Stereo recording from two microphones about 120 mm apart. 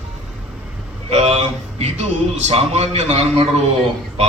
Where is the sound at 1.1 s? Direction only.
65° right (ahead or behind).